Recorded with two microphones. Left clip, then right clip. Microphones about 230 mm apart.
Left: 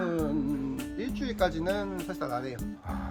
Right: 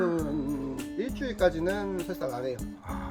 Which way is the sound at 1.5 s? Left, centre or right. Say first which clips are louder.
Right 3 dB; left.